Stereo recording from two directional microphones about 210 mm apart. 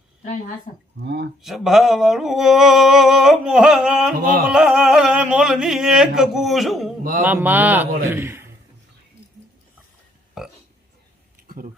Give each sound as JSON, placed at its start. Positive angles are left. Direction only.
{"t": 0.2, "sound": "speech", "side_deg": 40}
{"t": 0.9, "sound": "speech", "side_deg": -50}
{"t": 1.4, "sound": "a sound", "side_deg": 0}
{"t": 7.0, "sound": "mantra", "side_deg": -45}
{"t": 7.3, "sound": "a man's voice", "side_deg": -10}
{"t": 10.4, "sound": "burping", "side_deg": 0}
{"t": 11.4, "sound": "a sound", "side_deg": -40}